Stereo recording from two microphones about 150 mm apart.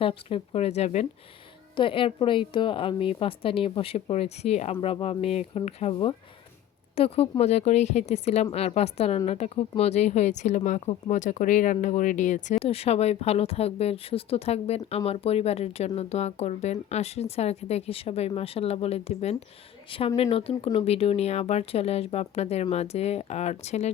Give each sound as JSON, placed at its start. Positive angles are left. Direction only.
{"t": 0.0, "sound": "a woman's voice", "side_deg": 40}
{"t": 1.7, "sound": "a woman's voice", "side_deg": 35}